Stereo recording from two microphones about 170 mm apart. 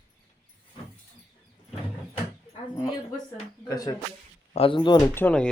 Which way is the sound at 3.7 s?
20° left (ahead or behind).